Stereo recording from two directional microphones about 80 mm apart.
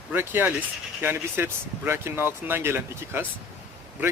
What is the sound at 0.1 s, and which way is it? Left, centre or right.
Speech, right.